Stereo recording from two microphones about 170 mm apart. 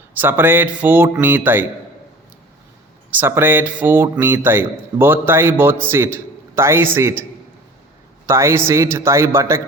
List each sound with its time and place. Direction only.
0.1 s speech: 10° right (ahead or behind)
3.1 s speech: 10° right (ahead or behind)
8.3 s speech: 15° right (ahead or behind)